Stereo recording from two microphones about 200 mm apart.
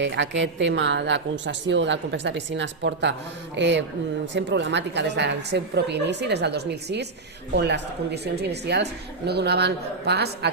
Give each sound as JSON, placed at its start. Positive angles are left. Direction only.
{"t": 0.0, "sound": "a woman's voice", "side_deg": -60}